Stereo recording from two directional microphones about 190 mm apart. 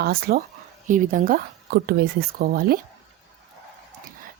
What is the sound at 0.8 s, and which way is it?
A woman's voice, 45° right (ahead or behind).